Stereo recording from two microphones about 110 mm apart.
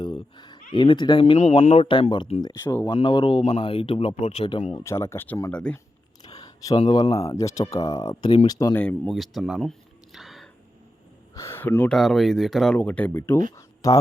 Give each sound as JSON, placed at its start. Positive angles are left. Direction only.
{"t": 0.0, "sound": "a sound", "side_deg": 45}
{"t": 1.2, "sound": "speech", "side_deg": 65}
{"t": 1.9, "sound": "speech", "side_deg": 45}
{"t": 2.8, "sound": "speech", "side_deg": 45}
{"t": 4.8, "sound": "speech", "side_deg": 25}
{"t": 6.2, "sound": "a sound", "side_deg": 35}
{"t": 6.7, "sound": "speech", "side_deg": 50}
{"t": 7.2, "sound": "speech", "side_deg": 30}
{"t": 8.7, "sound": "speech", "side_deg": 15}
{"t": 9.0, "sound": "a sound", "side_deg": 0}
{"t": 11.3, "sound": "speech", "side_deg": 20}
{"t": 11.9, "sound": "speech", "side_deg": 5}
{"t": 12.7, "sound": "speech", "side_deg": 15}